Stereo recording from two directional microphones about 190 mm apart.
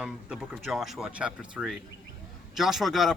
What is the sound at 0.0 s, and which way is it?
Speech, 5° right (ahead or behind).